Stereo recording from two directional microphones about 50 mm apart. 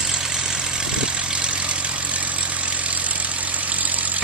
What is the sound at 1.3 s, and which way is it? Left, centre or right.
Vehicle, right.